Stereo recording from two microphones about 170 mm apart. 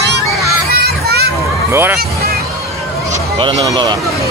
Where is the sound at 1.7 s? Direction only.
15° right (ahead or behind).